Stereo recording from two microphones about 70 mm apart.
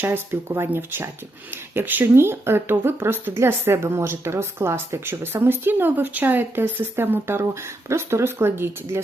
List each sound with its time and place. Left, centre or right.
0.0 s speech: right